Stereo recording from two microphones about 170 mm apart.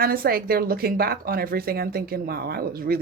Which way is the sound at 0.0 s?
60° right (ahead or behind).